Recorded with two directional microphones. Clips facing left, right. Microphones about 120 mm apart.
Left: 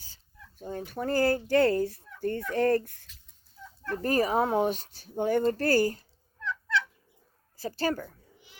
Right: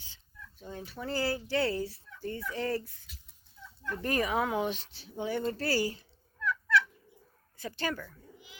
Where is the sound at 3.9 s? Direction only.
40° left (ahead or behind).